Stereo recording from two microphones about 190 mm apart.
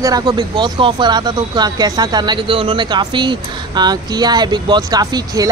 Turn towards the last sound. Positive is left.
turn(degrees=-20)  # may be behind; listen again after turning